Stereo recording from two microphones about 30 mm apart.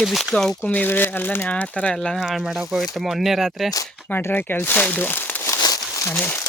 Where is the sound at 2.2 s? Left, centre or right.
Centre.